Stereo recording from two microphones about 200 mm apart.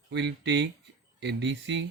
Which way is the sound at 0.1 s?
60° right (ahead or behind).